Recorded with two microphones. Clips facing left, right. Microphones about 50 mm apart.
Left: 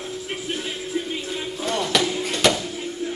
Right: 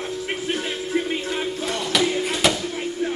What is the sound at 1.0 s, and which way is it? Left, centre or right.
Music, right.